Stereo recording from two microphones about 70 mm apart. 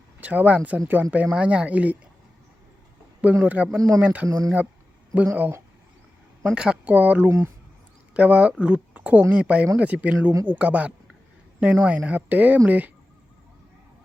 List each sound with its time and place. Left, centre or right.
0.2 s speech: right
3.4 s speech: centre
3.8 s speech: right
4.0 s speech: right
4.3 s speech: right
5.2 s speech: right
6.4 s speech: centre
7.3 s speech: right
8.1 s speech: centre